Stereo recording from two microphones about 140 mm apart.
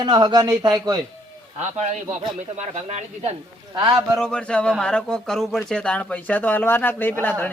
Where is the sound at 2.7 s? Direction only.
50° right (ahead or behind).